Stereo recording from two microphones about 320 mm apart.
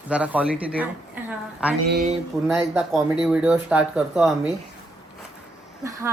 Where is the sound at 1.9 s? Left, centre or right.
Right.